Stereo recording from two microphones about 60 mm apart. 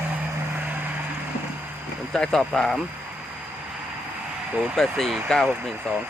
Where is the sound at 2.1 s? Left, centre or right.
Centre.